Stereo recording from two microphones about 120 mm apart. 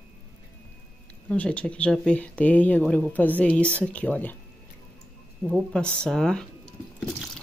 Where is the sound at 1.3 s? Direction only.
10° left (ahead or behind).